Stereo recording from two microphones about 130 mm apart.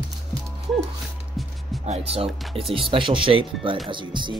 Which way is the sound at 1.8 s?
55° right (ahead or behind).